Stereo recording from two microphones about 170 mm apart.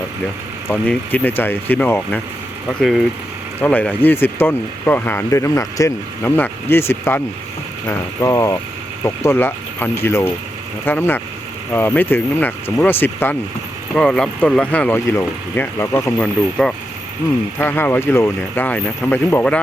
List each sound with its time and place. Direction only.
0.7 s speech: 10° left (ahead or behind)
3.6 s speech: 10° left (ahead or behind)